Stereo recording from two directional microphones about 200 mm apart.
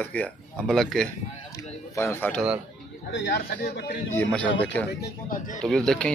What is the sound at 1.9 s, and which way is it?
Speech, 15° left (ahead or behind).